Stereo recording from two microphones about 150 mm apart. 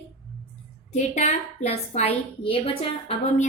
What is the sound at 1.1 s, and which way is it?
A woman's voice, 45° left (ahead or behind).